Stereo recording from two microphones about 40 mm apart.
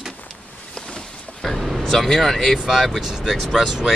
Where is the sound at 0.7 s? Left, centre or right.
Centre.